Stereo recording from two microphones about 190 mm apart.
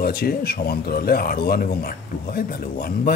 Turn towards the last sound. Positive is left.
turn(degrees=50)  # may be behind; listen again after turning